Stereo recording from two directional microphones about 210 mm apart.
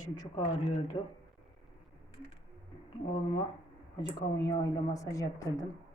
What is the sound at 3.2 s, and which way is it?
A woman's voice, 25° left (ahead or behind).